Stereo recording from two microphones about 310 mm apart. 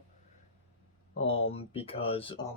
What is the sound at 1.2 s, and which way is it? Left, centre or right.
Speech, centre.